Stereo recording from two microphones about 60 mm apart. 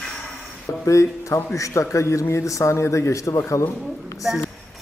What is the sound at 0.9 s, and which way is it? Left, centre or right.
Speech, left.